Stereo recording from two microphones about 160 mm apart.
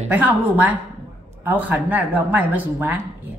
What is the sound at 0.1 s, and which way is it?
Speech, 10° right (ahead or behind).